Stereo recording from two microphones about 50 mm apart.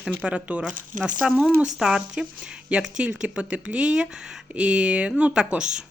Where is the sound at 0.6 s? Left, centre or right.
Centre.